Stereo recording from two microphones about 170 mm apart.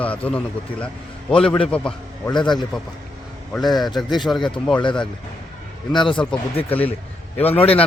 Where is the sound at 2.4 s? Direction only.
25° left (ahead or behind).